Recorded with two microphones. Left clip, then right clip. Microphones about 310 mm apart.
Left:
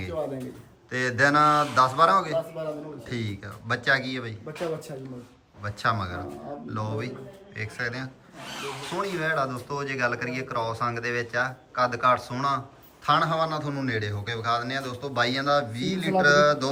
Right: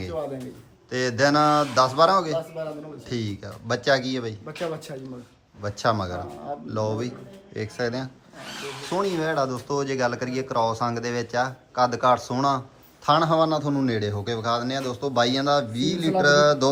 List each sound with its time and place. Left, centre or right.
0.0 s speech: centre